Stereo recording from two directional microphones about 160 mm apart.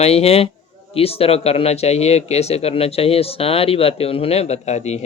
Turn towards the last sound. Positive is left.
turn(degrees=45)  # may be behind; listen again after turning